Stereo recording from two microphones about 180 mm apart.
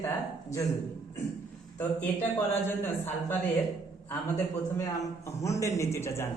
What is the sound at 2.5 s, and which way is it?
Speech, 10° left (ahead or behind).